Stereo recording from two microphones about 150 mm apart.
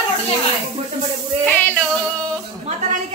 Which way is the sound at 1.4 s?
10° left (ahead or behind).